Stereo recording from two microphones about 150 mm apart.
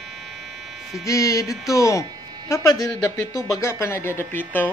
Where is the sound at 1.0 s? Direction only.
20° left (ahead or behind).